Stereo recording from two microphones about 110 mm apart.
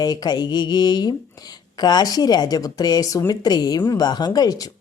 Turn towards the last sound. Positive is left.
turn(degrees=35)  # may be behind; listen again after turning